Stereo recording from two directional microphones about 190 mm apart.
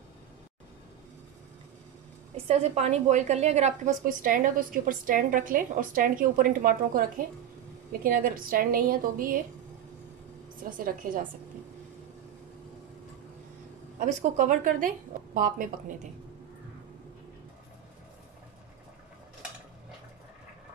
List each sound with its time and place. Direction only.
2.3 s a woman's voice: 35° right (ahead or behind); by 9.4 s 50° right (ahead or behind)
10.6 s a woman's voice: 45° right (ahead or behind)
13.9 s a woman's voice: 40° right (ahead or behind)